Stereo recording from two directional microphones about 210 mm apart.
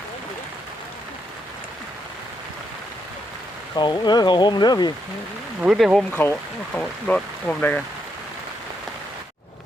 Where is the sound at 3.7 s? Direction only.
20° left (ahead or behind).